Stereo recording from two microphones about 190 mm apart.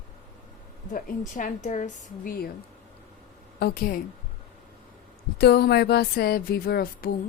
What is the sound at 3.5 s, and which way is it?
Speech, 55° left (ahead or behind).